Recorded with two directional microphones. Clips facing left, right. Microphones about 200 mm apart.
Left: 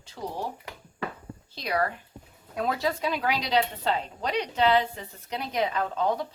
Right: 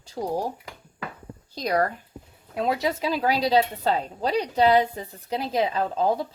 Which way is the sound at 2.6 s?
20° right (ahead or behind).